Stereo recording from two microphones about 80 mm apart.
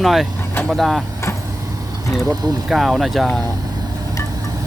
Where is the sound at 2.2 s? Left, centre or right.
Right.